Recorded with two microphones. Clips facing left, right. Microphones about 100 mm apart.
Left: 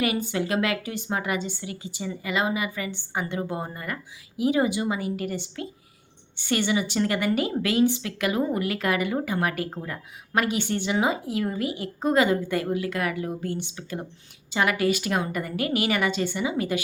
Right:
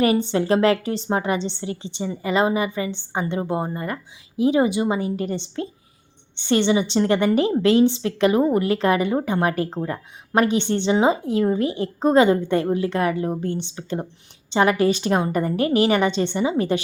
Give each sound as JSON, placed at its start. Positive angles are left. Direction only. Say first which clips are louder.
{"t": 0.0, "sound": "a woman's voice", "louder": "right 7 dB", "side_deg": -30}